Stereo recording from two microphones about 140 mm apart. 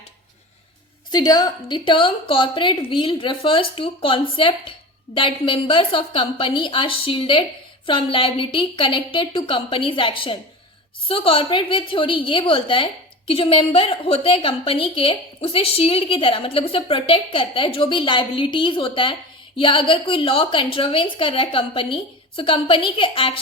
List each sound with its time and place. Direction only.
1.1 s a woman's voice: 30° left (ahead or behind)